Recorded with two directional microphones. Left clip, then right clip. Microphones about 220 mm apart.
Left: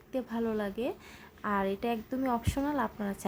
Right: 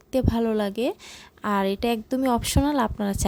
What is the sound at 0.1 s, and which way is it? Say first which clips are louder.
A woman's voice: right 10 dB; 50° right (ahead or behind).